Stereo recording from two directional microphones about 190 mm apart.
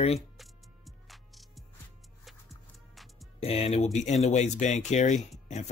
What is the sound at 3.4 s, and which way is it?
Speech, 30° left (ahead or behind).